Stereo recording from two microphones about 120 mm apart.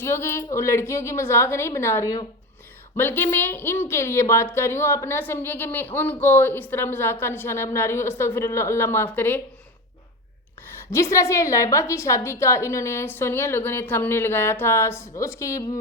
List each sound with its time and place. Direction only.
0.0 s a woman's voice: 20° left (ahead or behind)
10.9 s a woman's voice: 25° left (ahead or behind)